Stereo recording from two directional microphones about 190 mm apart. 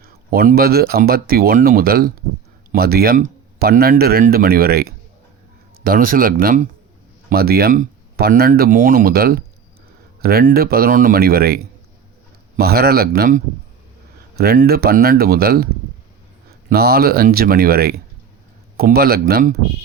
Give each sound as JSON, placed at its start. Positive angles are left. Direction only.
{"t": 0.3, "sound": "speech", "side_deg": -50}
{"t": 7.3, "sound": "speech", "side_deg": -55}